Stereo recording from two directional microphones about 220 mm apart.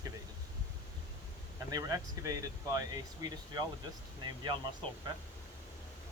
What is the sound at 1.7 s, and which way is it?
Speech, 15° right (ahead or behind).